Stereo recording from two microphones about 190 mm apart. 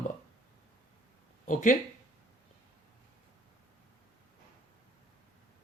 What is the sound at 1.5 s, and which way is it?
Speech, 40° left (ahead or behind).